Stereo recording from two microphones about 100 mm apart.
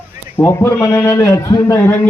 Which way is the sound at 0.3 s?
25° left (ahead or behind).